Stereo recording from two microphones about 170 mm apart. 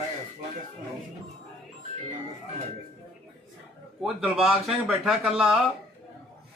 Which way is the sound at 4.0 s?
Centre (ahead or behind).